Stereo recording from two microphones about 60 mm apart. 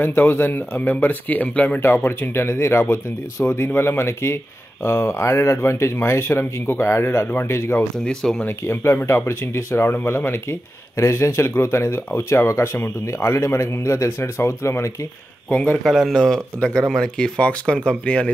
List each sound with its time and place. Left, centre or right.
0.0 s speech: left
1.8 s speech: left
8.0 s speech: centre
8.5 s speech: left
15.5 s speech: centre
15.8 s speech: centre